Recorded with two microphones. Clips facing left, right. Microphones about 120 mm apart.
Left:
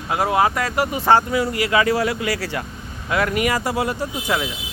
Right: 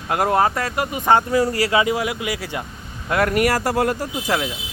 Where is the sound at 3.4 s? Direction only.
45° right (ahead or behind).